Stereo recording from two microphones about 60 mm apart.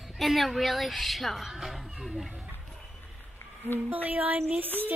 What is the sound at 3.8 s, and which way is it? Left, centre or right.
Music, right.